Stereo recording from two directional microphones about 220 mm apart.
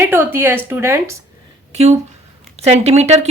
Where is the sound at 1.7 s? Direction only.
30° right (ahead or behind).